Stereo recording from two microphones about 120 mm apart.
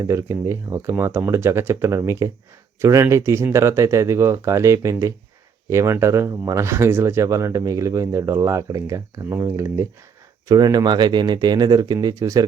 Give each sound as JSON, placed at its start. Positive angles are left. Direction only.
{"t": 0.0, "sound": "speech", "side_deg": -25}
{"t": 10.5, "sound": "speech", "side_deg": -35}